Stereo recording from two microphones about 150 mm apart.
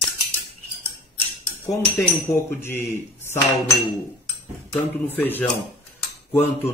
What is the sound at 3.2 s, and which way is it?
Cutlery, 15° left (ahead or behind).